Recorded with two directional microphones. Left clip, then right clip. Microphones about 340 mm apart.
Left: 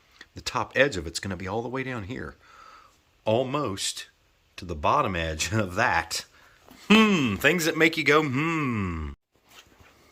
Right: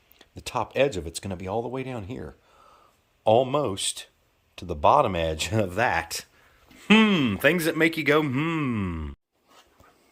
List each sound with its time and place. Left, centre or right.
0.2 s a man's voice: centre